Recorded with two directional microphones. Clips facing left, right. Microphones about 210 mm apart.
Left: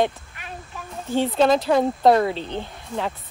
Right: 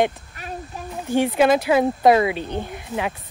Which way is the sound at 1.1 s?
15° right (ahead or behind).